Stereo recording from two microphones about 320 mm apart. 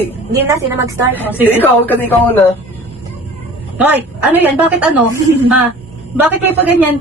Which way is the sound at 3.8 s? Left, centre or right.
Centre.